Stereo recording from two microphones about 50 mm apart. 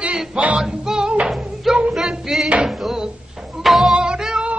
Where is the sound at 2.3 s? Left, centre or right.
Centre.